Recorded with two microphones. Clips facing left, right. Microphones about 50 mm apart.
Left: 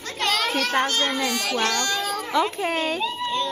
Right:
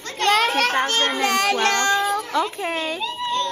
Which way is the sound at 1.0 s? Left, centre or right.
Right.